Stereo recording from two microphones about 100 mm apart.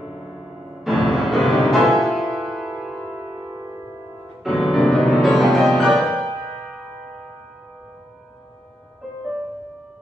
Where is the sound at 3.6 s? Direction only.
20° right (ahead or behind).